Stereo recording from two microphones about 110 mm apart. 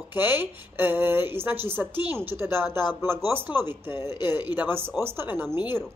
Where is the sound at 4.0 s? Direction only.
40° left (ahead or behind).